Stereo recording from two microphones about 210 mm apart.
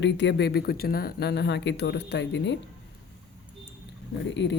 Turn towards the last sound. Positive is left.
turn(degrees=60)  # may be behind; listen again after turning